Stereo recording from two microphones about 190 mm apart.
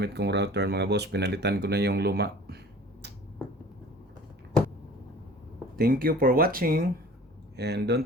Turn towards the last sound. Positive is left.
turn(degrees=-60)  # may be behind; listen again after turning